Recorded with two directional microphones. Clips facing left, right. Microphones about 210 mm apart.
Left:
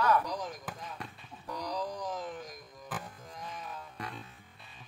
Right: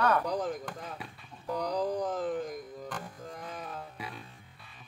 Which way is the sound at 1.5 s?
55° right (ahead or behind).